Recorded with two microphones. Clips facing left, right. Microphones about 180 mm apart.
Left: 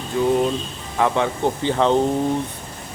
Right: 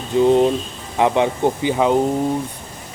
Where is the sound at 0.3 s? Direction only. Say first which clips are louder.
Right 4 dB; 25° right (ahead or behind).